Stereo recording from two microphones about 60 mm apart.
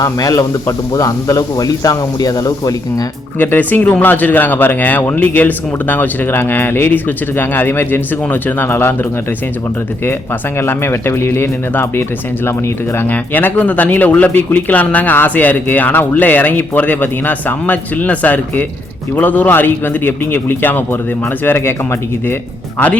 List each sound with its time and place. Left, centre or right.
0.0 s a man's voice: left
3.3 s speech: left
10.6 s speech: left
13.1 s speech: left